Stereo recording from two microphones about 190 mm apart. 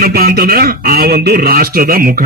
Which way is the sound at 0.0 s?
55° right (ahead or behind).